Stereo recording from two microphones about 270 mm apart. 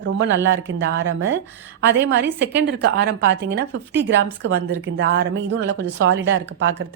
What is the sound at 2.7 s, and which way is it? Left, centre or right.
A woman's voice, right.